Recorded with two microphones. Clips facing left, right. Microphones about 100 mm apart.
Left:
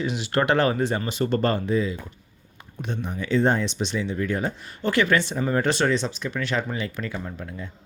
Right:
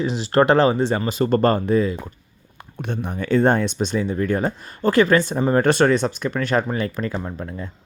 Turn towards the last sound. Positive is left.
turn(degrees=-40)  # may be behind; listen again after turning